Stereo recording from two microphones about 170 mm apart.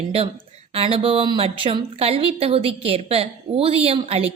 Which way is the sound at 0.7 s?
35° right (ahead or behind).